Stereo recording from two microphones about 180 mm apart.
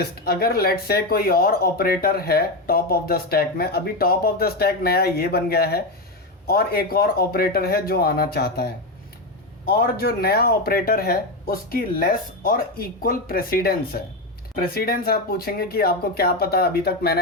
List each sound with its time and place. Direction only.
0.0 s speech: 60° left (ahead or behind)
9.6 s speech: 55° left (ahead or behind)